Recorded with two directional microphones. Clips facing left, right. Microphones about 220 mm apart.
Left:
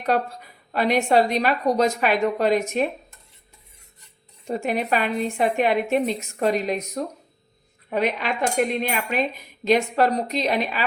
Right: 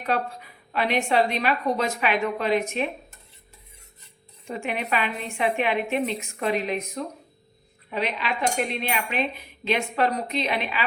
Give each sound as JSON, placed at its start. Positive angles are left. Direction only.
{"t": 0.7, "sound": "a woman's voice", "side_deg": 40}
{"t": 4.4, "sound": "a woman's voice", "side_deg": 40}